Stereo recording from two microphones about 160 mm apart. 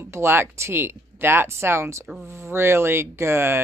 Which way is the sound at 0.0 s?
15° right (ahead or behind).